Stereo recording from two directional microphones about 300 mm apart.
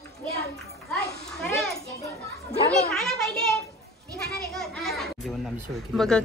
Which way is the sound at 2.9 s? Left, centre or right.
Centre.